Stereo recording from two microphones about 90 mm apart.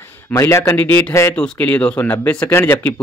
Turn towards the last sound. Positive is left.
turn(degrees=25)  # may be behind; listen again after turning